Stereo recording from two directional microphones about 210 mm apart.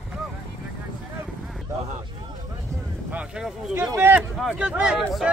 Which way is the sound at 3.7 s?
15° right (ahead or behind).